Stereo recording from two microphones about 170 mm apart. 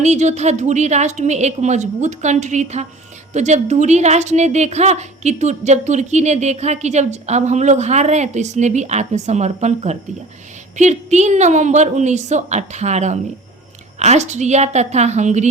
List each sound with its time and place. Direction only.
0.0 s a woman's voice: 45° right (ahead or behind)